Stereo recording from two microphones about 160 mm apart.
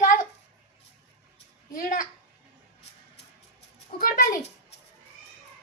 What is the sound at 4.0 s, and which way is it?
Speech, 60° left (ahead or behind).